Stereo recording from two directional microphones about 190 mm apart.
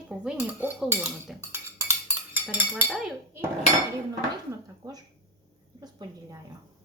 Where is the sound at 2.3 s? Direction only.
10° right (ahead or behind).